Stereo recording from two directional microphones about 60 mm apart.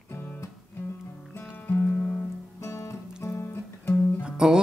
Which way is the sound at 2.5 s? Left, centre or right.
Left.